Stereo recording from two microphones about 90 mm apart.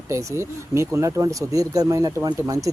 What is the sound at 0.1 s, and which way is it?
Speech, 35° right (ahead or behind).